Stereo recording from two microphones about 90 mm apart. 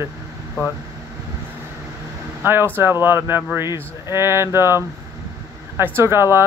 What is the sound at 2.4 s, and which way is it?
Speech, 25° right (ahead or behind).